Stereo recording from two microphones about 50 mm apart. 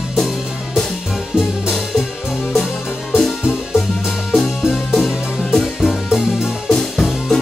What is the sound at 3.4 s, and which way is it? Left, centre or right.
Music, centre.